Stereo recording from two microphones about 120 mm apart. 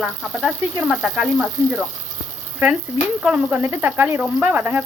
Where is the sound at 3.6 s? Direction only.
20° right (ahead or behind).